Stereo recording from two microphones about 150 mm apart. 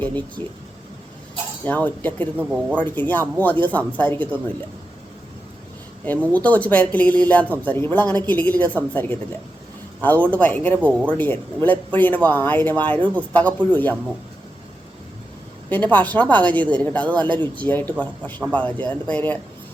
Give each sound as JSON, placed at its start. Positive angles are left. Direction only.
{"t": 0.0, "sound": "speech", "side_deg": 10}
{"t": 1.6, "sound": "speech", "side_deg": 10}
{"t": 2.4, "sound": "speech", "side_deg": -10}
{"t": 2.7, "sound": "speech", "side_deg": 10}
{"t": 6.2, "sound": "speech", "side_deg": 10}
{"t": 15.7, "sound": "speech", "side_deg": 10}
{"t": 17.2, "sound": "speech", "side_deg": -30}
{"t": 17.5, "sound": "speech", "side_deg": 10}